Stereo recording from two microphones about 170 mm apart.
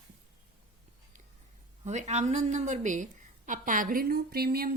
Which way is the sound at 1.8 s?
40° right (ahead or behind).